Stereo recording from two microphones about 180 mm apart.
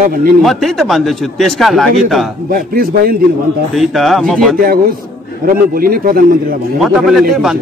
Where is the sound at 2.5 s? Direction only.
55° right (ahead or behind).